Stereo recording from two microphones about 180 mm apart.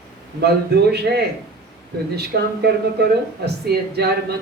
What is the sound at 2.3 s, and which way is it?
Speech, 65° right (ahead or behind).